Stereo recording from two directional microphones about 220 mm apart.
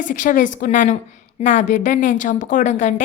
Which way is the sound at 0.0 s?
35° left (ahead or behind).